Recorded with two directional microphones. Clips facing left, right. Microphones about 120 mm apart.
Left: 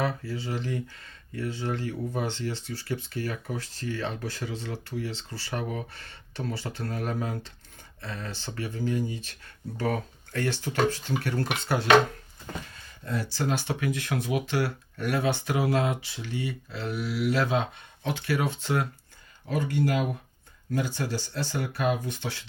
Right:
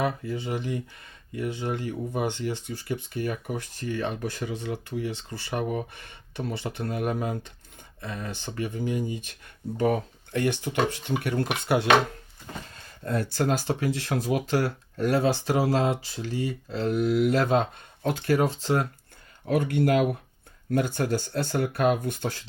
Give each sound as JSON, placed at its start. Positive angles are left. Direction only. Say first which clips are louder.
{"t": 0.0, "sound": "speech", "louder": "right 2 dB", "side_deg": -20}
{"t": 13.1, "sound": "speech", "louder": "right 4 dB", "side_deg": -55}
{"t": 13.6, "sound": "speech", "louder": "right 2 dB", "side_deg": -35}
{"t": 19.5, "sound": "speech", "louder": "right 4 dB", "side_deg": -60}